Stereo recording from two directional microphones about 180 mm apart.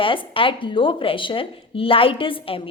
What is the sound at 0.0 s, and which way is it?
A woman's voice, 30° left (ahead or behind).